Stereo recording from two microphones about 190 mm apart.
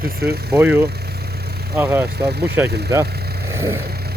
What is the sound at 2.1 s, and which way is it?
Speech, 60° right (ahead or behind).